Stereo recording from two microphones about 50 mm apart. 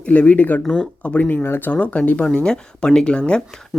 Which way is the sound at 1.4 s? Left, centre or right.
Left.